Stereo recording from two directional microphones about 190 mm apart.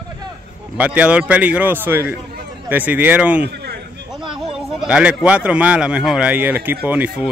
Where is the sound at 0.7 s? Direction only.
5° right (ahead or behind).